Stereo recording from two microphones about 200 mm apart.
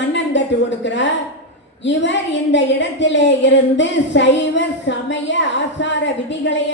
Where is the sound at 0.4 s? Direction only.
65° left (ahead or behind).